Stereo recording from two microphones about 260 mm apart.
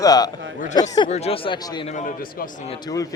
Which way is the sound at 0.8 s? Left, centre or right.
Left.